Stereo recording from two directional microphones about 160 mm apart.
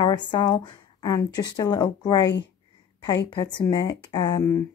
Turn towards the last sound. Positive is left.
turn(degrees=20)  # may be behind; listen again after turning